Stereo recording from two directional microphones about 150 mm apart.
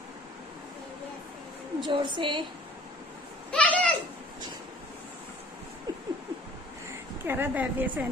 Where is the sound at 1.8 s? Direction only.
35° right (ahead or behind).